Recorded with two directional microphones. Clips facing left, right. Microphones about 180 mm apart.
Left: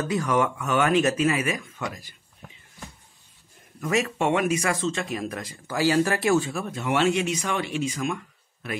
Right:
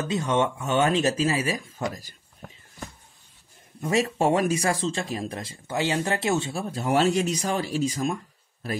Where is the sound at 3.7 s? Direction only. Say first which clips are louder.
Right 1 dB; 30° right (ahead or behind).